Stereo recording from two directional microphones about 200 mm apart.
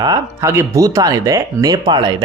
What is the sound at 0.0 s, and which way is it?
A man's voice, 15° right (ahead or behind).